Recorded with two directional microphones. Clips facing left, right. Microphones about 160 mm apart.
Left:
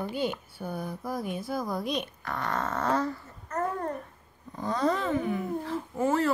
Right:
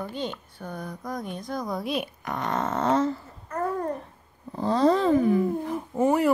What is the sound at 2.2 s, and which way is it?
Speech, 20° right (ahead or behind).